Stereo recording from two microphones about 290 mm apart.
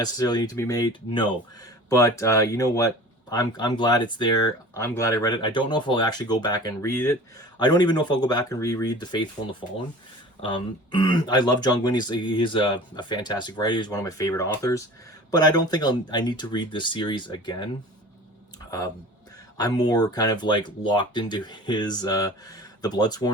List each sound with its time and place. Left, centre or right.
0.0 s speech: centre
19.5 s speech: centre